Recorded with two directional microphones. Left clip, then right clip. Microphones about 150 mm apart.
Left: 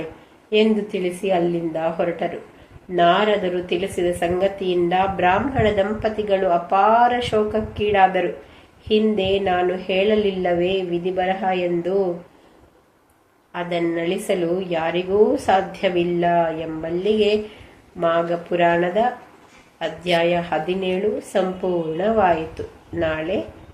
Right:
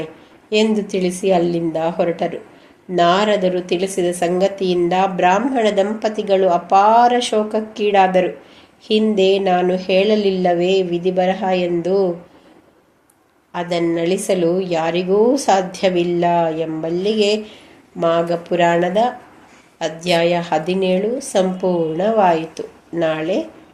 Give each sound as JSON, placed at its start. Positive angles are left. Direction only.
{"t": 0.5, "sound": "a woman's voice", "side_deg": -50}
{"t": 13.5, "sound": "a woman's voice", "side_deg": -55}